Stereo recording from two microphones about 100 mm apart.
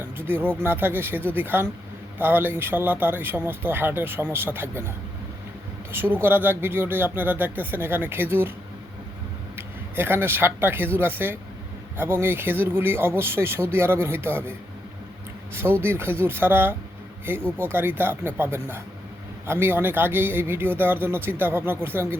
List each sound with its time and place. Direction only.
0.2 s speech: 20° right (ahead or behind)
5.9 s speech: 20° right (ahead or behind)
9.6 s speech: 20° right (ahead or behind)
15.5 s speech: 20° right (ahead or behind)